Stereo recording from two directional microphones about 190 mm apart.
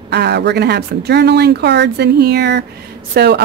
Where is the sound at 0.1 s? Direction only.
60° right (ahead or behind).